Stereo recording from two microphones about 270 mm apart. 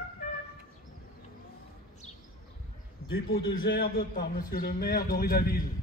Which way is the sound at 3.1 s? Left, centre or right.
Left.